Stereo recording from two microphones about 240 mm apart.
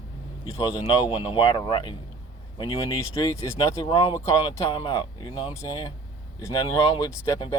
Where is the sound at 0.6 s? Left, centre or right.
Centre.